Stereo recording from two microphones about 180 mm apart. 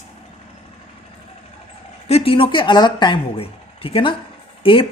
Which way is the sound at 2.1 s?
35° left (ahead or behind).